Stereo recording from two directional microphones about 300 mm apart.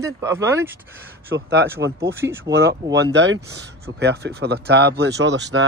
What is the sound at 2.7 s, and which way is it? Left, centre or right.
Speech, right.